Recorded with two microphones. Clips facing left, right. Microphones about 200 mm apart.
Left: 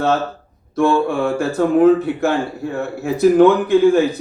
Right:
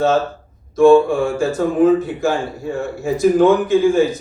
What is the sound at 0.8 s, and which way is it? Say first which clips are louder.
A man's voice: right 5 dB; 60° left (ahead or behind).